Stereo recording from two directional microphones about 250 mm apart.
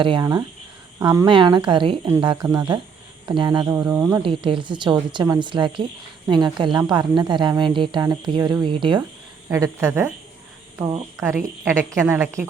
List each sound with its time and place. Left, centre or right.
0.0 s a woman's voice: centre